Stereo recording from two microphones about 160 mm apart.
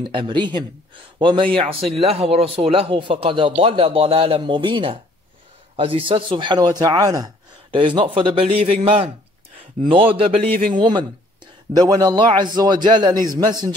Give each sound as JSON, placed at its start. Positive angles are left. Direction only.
{"t": 0.0, "sound": "a man's voice", "side_deg": -30}